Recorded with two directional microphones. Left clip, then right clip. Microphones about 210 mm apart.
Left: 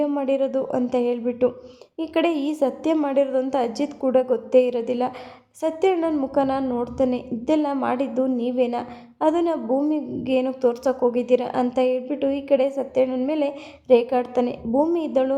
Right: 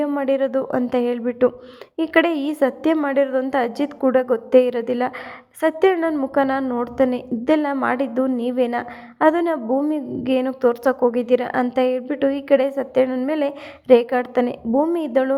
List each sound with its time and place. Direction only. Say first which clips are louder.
0.0 s a woman's voice: right 2 dB; 15° right (ahead or behind)